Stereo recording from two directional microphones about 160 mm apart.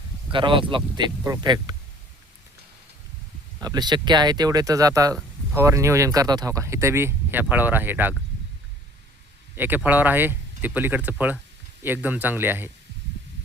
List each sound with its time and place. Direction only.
0.3 s speech: 30° right (ahead or behind)
3.6 s speech: 25° right (ahead or behind)
9.6 s speech: 10° right (ahead or behind)